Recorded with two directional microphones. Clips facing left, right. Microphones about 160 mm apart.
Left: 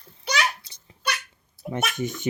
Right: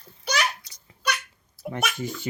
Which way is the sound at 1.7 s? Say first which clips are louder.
Left 2 dB; 20° left (ahead or behind).